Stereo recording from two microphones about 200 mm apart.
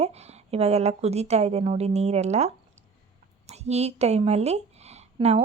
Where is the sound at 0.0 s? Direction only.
30° right (ahead or behind).